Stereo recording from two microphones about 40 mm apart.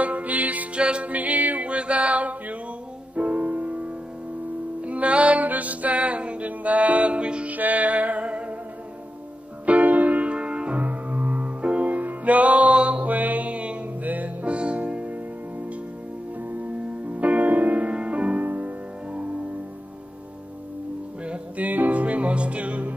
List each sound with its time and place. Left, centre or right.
0.0 s music: right
0.7 s music: right
1.0 s music: right
1.7 s a sound: right
3.2 s music: right
7.5 s music: right
9.7 s music: right
10.8 s music: right
17.1 s music: right
18.4 s music: right
21.2 s music: right
21.6 s music: right